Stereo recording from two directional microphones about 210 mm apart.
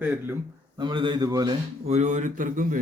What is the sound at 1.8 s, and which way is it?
Speech, 35° right (ahead or behind).